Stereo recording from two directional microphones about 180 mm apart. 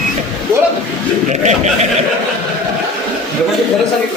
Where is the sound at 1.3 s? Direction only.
40° right (ahead or behind).